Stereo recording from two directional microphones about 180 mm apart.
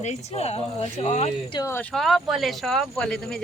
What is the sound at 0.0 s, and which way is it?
Speech, 35° left (ahead or behind).